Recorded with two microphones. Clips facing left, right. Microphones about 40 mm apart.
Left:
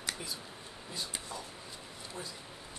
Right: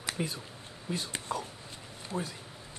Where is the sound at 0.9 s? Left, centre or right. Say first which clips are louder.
Right 7 dB; right.